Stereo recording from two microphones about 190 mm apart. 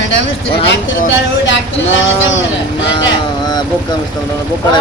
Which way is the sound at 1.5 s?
80° left.